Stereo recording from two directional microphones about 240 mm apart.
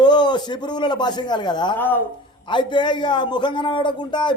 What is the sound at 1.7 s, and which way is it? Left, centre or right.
Speech, centre.